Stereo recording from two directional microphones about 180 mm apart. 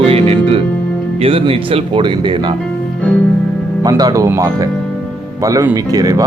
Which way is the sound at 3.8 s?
20° right (ahead or behind).